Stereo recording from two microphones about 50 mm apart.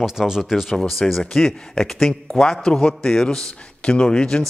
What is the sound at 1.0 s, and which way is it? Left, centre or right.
Speech, centre.